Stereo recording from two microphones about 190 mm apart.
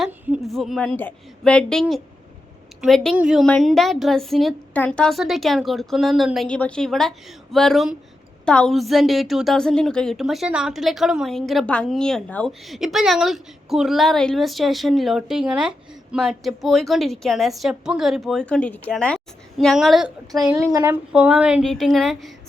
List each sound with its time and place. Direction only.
0.0 s a woman's voice: centre (ahead or behind)
20.6 s speech: 15° right (ahead or behind)
21.1 s a woman's voice: 5° right (ahead or behind)